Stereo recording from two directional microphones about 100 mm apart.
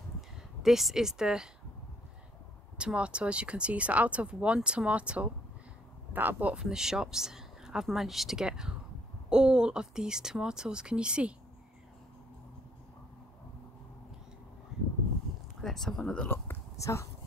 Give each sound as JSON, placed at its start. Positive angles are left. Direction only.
{"t": 0.6, "sound": "speech", "side_deg": 0}
{"t": 2.8, "sound": "speech", "side_deg": -10}
{"t": 15.6, "sound": "speech", "side_deg": 5}
{"t": 16.3, "sound": "a sound", "side_deg": 25}